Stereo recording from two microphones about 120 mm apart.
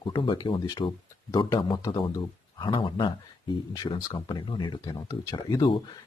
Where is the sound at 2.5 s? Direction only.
40° left (ahead or behind).